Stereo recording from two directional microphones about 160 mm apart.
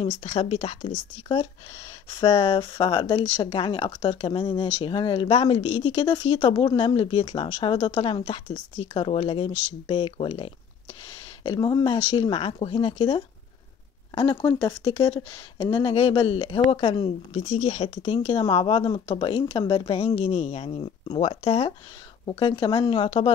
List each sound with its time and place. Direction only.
0.2 s speech: 40° left (ahead or behind)
2.1 s speech: 35° left (ahead or behind)